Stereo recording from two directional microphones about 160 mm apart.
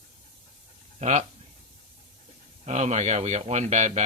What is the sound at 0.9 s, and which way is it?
Speech, 45° right (ahead or behind).